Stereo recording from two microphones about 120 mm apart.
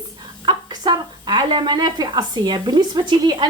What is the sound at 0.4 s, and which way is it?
Speech, 35° right (ahead or behind).